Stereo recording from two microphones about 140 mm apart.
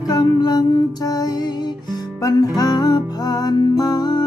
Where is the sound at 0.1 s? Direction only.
30° left (ahead or behind).